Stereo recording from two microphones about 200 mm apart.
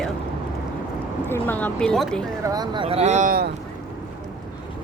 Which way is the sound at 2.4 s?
20° right (ahead or behind).